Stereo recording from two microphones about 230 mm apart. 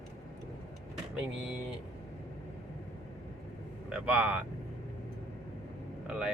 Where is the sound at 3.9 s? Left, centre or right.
Centre.